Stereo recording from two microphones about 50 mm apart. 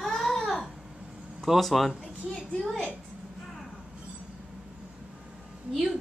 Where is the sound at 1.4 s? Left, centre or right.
Centre.